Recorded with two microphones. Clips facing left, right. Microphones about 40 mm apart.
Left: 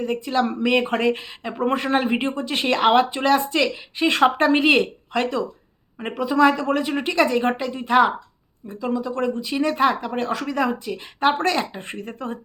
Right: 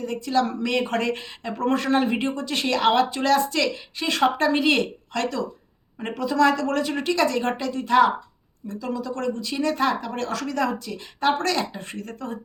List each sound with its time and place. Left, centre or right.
0.0 s speech: left